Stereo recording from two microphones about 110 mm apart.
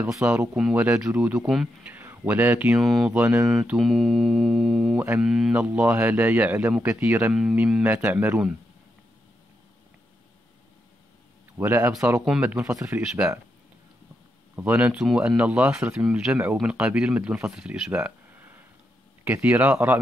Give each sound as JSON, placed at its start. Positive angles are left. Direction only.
{"t": 0.0, "sound": "speech", "side_deg": -20}
{"t": 1.8, "sound": "speech", "side_deg": -15}
{"t": 2.8, "sound": "music", "side_deg": 0}
{"t": 3.1, "sound": "speech", "side_deg": -15}
{"t": 3.4, "sound": "music", "side_deg": -5}
{"t": 4.9, "sound": "speech", "side_deg": -20}
{"t": 5.2, "sound": "music", "side_deg": -5}
{"t": 5.5, "sound": "speech", "side_deg": -15}
{"t": 11.5, "sound": "speech", "side_deg": -20}
{"t": 14.5, "sound": "speech", "side_deg": -20}